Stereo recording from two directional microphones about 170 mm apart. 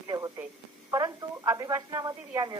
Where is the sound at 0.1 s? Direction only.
20° right (ahead or behind).